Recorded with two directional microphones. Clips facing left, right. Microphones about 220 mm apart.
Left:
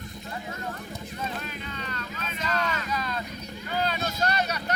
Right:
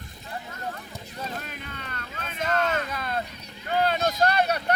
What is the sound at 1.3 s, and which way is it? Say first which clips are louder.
Vehicle: left 1 dB; 50° right (ahead or behind).